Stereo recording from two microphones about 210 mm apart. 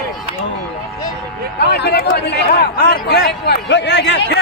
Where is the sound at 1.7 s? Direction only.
50° left (ahead or behind).